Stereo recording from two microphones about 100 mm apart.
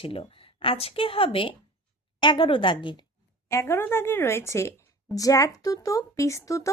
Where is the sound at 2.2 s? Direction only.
55° left (ahead or behind).